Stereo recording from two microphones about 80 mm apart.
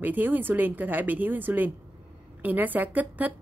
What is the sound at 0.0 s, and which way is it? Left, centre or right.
A woman's voice, right.